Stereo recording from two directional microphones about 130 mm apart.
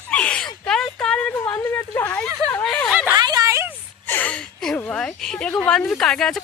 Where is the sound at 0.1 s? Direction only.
10° left (ahead or behind).